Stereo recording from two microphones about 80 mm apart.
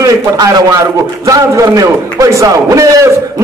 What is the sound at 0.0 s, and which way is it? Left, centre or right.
A man's voice, right.